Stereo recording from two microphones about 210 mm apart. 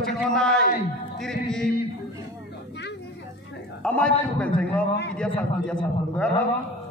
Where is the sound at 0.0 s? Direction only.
Centre (ahead or behind).